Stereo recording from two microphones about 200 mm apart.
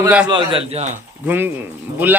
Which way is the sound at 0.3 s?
25° right (ahead or behind).